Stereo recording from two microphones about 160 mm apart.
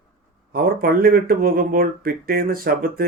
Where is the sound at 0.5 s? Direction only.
65° right (ahead or behind).